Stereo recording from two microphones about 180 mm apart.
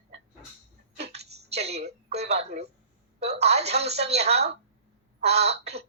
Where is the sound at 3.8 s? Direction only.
35° right (ahead or behind).